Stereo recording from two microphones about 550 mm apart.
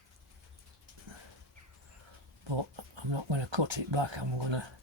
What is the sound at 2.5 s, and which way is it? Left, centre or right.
Speech, right.